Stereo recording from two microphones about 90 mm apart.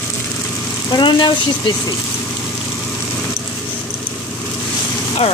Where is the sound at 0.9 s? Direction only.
60° left (ahead or behind).